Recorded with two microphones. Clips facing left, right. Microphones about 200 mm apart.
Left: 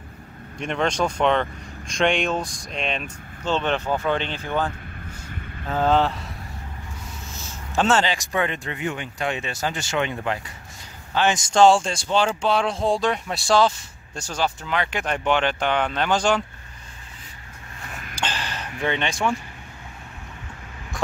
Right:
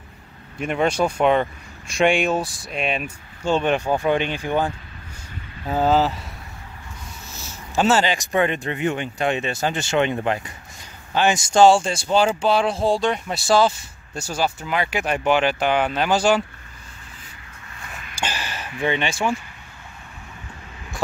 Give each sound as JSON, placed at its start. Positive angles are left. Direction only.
{"t": 0.6, "sound": "speech", "side_deg": -5}
{"t": 7.7, "sound": "speech", "side_deg": -5}
{"t": 11.1, "sound": "speech", "side_deg": -10}
{"t": 18.1, "sound": "a sound", "side_deg": -10}